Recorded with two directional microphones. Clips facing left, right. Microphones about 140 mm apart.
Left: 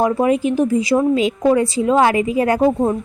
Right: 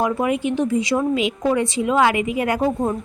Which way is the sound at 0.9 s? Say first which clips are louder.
Left 6 dB; 15° left (ahead or behind).